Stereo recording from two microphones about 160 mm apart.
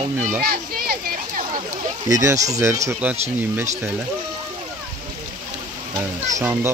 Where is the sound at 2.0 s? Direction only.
20° right (ahead or behind).